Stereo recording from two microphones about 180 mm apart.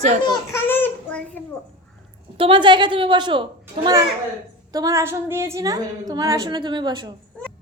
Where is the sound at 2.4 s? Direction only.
25° right (ahead or behind).